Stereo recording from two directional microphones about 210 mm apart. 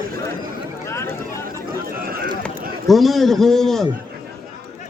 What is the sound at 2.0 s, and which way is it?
Speech, 45° right (ahead or behind).